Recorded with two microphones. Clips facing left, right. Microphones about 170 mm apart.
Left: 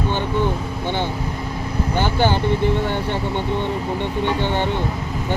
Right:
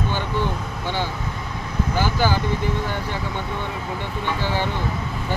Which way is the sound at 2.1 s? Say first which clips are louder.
Left 4 dB; 25° left (ahead or behind).